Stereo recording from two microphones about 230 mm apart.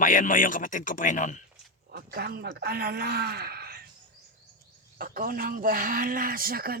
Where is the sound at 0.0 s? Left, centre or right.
Left.